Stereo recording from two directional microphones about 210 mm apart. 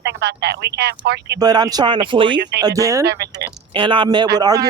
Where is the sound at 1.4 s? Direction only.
20° right (ahead or behind).